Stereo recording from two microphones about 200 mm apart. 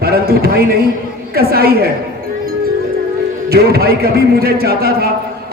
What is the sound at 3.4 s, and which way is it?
A man's voice, 50° right (ahead or behind).